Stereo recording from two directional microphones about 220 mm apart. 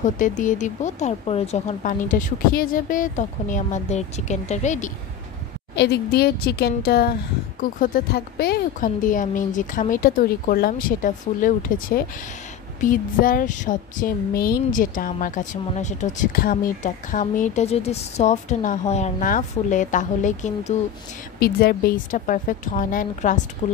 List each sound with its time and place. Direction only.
0.0 s speech: 35° left (ahead or behind)
5.8 s a woman's voice: 45° left (ahead or behind)
21.4 s speech: 45° left (ahead or behind)